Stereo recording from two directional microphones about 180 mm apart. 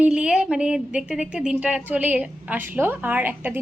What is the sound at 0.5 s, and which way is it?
A woman's voice, 5° right (ahead or behind).